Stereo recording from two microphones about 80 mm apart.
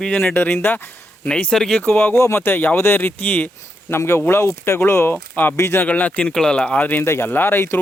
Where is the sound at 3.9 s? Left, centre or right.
Left.